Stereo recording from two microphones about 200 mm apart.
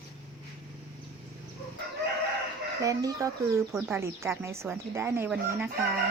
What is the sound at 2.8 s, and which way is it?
Speech, 15° right (ahead or behind).